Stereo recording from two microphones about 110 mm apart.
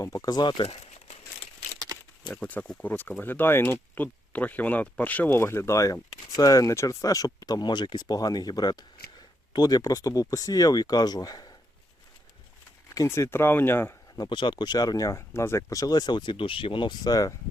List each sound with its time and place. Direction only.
0.0 s speech: 35° left (ahead or behind)
0.6 s crumpling: 65° left (ahead or behind)
2.3 s speech: 10° left (ahead or behind); by 11.5 s 35° left (ahead or behind)
12.9 s speech: 30° left (ahead or behind)
14.2 s speech: 45° left (ahead or behind)